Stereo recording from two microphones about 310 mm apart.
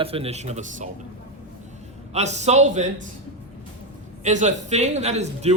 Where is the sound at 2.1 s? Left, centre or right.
Right.